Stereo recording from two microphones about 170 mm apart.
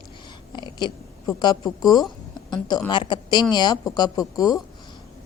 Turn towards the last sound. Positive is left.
turn(degrees=20)  # may be behind; listen again after turning